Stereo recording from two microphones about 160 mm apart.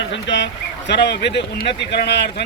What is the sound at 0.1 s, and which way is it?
Speech, 90° left.